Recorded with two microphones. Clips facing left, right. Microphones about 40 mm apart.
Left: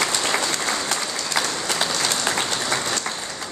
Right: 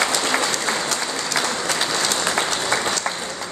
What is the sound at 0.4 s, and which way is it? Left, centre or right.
Applause, centre.